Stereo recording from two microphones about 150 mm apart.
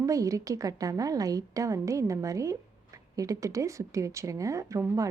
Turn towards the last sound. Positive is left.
turn(degrees=-20)  # may be behind; listen again after turning